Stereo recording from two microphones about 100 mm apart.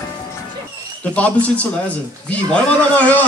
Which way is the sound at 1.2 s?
15° left (ahead or behind).